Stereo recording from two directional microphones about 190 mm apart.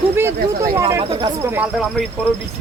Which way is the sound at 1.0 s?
30° right (ahead or behind).